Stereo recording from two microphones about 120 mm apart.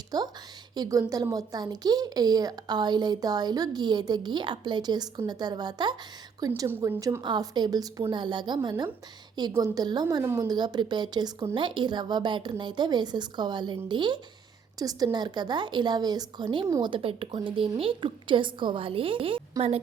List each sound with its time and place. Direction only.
0.1 s a woman's voice: 35° right (ahead or behind)
6.7 s a woman's voice: 20° right (ahead or behind)
7.2 s a woman's voice: 35° right (ahead or behind)
10.5 s a woman's voice: 35° right (ahead or behind); by 19.8 s 55° right (ahead or behind)